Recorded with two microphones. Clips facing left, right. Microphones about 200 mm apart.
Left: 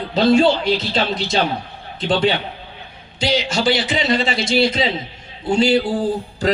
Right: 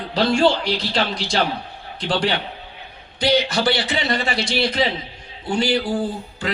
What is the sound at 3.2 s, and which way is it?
Speech, 55° right (ahead or behind).